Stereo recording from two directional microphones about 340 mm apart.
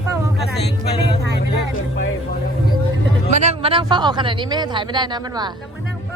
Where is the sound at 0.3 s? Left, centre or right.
Left.